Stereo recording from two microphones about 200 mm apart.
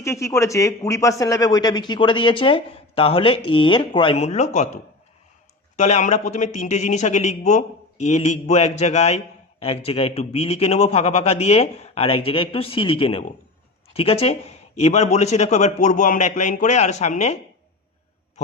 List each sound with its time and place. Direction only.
0.0 s a man's voice: 15° left (ahead or behind); by 17.3 s 35° left (ahead or behind)